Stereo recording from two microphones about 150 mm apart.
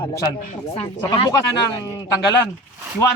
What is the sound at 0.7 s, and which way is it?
Speech, 30° left (ahead or behind).